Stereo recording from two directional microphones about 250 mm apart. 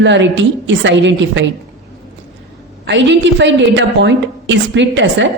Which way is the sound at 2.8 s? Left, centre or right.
Right.